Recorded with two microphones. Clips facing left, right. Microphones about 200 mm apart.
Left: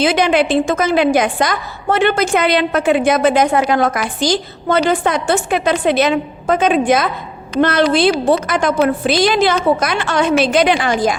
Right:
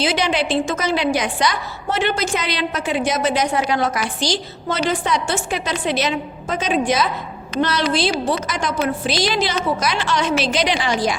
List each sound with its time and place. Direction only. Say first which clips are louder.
0.0 s a woman's voice: left 6 dB; 55° left (ahead or behind)